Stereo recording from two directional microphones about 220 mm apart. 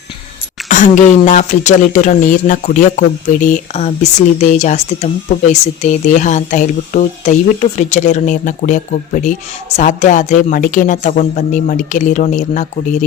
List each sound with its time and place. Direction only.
0.7 s speech: 35° left (ahead or behind)